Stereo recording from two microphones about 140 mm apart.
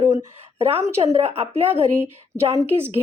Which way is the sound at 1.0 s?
45° right (ahead or behind).